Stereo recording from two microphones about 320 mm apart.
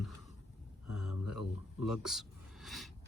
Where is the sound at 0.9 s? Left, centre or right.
Left.